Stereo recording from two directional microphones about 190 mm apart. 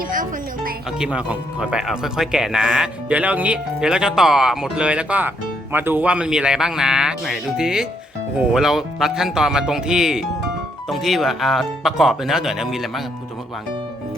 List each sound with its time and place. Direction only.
0.1 s music: 45° right (ahead or behind)
0.9 s speech: 5° right (ahead or behind)